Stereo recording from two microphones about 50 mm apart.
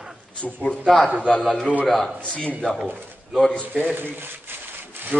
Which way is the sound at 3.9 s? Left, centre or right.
Right.